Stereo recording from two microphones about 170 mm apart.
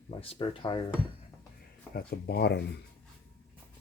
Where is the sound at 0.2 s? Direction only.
30° left (ahead or behind).